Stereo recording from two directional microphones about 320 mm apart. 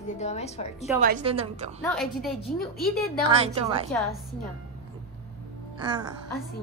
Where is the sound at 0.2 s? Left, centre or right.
Left.